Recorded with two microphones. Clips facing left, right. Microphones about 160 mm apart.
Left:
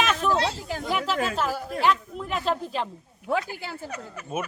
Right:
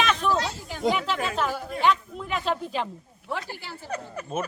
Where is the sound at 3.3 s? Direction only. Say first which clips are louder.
Left 6 dB; 45° left (ahead or behind).